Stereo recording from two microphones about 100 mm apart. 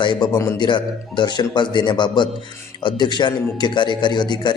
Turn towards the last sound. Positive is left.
turn(degrees=45)  # may be behind; listen again after turning